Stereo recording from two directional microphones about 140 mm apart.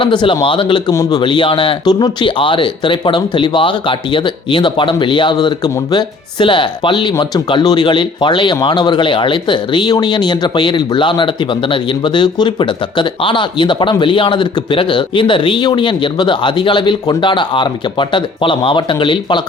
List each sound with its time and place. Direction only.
0.0 s speech: 35° left (ahead or behind)